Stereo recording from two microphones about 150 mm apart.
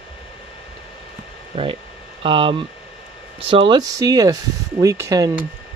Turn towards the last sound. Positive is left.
turn(degrees=-25)  # may be behind; listen again after turning